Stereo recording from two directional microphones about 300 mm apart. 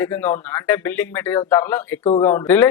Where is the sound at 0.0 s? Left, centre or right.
Centre.